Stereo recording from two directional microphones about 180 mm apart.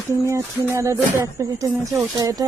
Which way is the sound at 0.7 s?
15° right (ahead or behind).